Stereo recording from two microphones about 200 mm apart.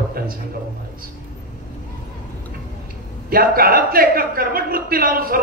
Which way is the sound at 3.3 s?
45° right (ahead or behind).